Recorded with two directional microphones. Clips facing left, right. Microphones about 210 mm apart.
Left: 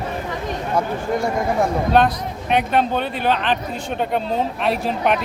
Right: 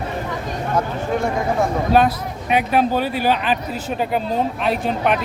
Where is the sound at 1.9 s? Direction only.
5° right (ahead or behind).